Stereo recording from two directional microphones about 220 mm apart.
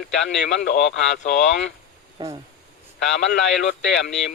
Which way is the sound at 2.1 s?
25° right (ahead or behind).